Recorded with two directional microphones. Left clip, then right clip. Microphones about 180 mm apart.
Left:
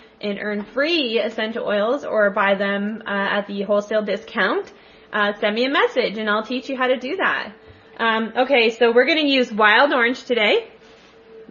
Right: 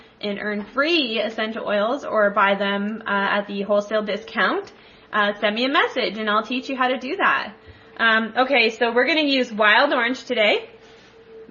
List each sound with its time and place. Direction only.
0.2 s a woman's voice: 15° left (ahead or behind); by 10.5 s 30° left (ahead or behind)